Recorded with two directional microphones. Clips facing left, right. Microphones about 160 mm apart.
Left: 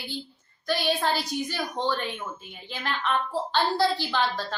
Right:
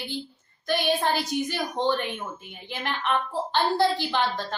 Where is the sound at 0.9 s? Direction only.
20° right (ahead or behind).